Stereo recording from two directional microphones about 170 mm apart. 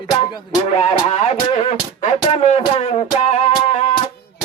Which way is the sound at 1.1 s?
35° left (ahead or behind).